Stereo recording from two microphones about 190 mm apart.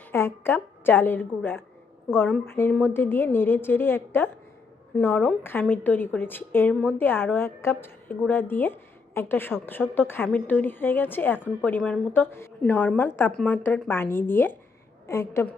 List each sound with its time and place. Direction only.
0.1 s a woman's voice: 10° left (ahead or behind)